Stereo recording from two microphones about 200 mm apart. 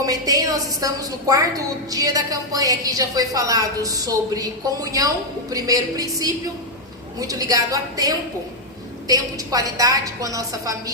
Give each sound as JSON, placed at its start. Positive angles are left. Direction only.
{"t": 0.0, "sound": "a woman's voice", "side_deg": -15}